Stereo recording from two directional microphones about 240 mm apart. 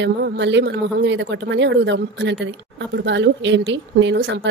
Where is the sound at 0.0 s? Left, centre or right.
Right.